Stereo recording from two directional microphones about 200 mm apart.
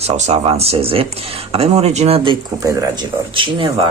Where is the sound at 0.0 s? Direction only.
35° right (ahead or behind).